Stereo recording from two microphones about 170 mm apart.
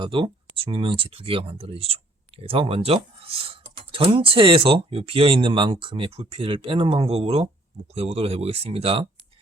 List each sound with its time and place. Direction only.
0.0 s speech: 30° right (ahead or behind)